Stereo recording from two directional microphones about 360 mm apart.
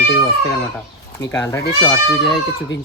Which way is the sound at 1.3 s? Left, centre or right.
Centre.